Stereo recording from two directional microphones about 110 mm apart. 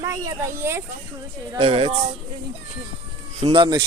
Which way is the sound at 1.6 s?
60° right (ahead or behind).